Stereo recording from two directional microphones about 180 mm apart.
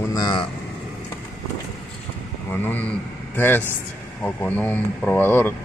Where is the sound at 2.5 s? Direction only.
10° left (ahead or behind).